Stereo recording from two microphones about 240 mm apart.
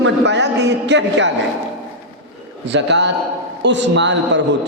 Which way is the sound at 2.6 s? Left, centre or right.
Right.